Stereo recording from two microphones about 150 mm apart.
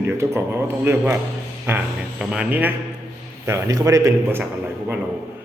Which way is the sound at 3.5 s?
20° right (ahead or behind).